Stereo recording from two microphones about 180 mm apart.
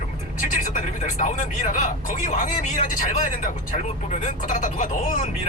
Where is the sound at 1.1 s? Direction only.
45° left (ahead or behind).